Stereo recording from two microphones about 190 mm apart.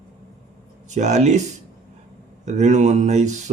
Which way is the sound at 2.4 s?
40° right (ahead or behind).